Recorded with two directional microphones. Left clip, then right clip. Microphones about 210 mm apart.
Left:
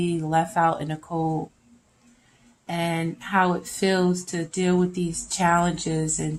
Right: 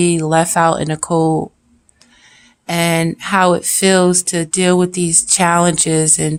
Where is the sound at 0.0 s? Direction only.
45° right (ahead or behind).